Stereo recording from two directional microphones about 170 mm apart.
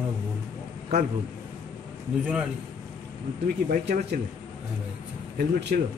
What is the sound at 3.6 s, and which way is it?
Speech, 55° right (ahead or behind).